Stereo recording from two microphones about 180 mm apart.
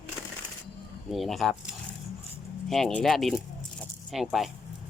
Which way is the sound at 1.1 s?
Centre (ahead or behind).